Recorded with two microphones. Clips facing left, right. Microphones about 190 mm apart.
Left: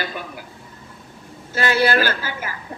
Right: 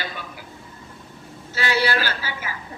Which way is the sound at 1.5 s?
50° left (ahead or behind).